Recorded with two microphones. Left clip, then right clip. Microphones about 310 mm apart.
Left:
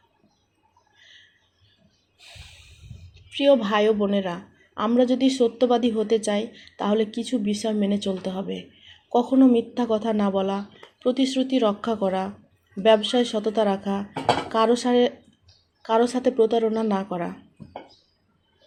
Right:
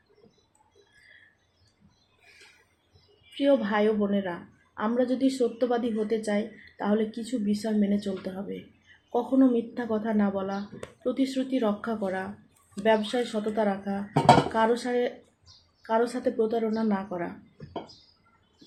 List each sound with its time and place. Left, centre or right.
3.3 s speech: left